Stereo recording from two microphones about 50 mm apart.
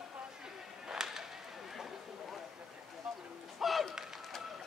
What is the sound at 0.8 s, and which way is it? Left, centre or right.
Whip, centre.